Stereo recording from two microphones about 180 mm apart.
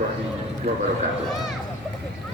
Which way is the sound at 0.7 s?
50° right (ahead or behind).